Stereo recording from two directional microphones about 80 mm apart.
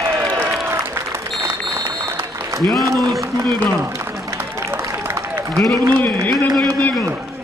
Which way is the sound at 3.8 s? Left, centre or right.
Right.